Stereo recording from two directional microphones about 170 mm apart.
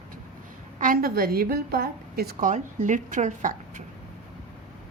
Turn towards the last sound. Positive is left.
turn(degrees=-50)  # may be behind; listen again after turning